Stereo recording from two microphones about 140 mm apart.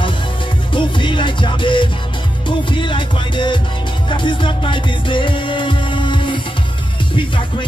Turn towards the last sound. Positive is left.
turn(degrees=35)  # may be behind; listen again after turning